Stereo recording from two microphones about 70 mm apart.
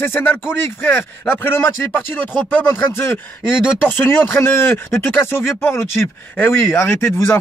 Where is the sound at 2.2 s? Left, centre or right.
Left.